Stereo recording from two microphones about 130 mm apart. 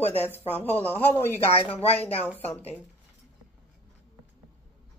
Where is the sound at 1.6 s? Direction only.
50° left (ahead or behind).